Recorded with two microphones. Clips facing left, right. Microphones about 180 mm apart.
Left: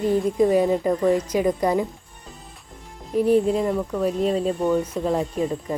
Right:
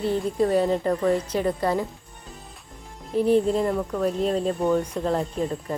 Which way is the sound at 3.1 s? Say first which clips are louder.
Left 1 dB; 10° left (ahead or behind).